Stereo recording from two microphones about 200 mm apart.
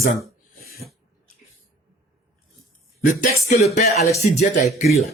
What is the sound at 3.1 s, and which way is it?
Music, 40° left (ahead or behind).